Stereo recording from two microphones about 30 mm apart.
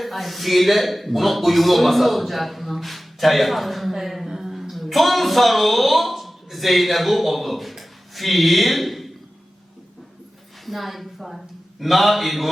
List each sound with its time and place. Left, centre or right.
0.0 s a man's voice: centre
4.3 s a sound: centre
4.7 s speech: centre
10.7 s speech: centre